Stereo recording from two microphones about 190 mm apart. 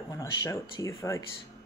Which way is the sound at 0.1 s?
15° left (ahead or behind).